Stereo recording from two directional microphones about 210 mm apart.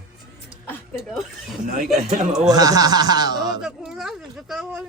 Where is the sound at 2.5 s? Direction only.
15° right (ahead or behind).